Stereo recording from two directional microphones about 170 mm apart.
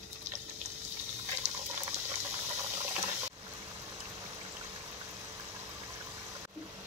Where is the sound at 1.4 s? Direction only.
45° right (ahead or behind).